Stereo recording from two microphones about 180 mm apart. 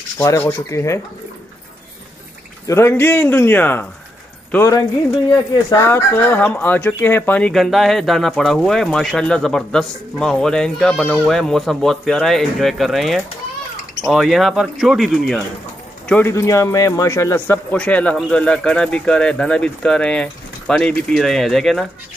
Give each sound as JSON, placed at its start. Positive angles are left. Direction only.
{"t": 0.2, "sound": "a man's voice", "side_deg": 15}
{"t": 2.6, "sound": "a man's voice", "side_deg": 15}
{"t": 16.1, "sound": "speech", "side_deg": 15}